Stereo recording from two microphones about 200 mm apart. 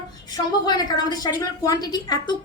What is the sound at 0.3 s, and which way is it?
A woman's voice, 20° left (ahead or behind).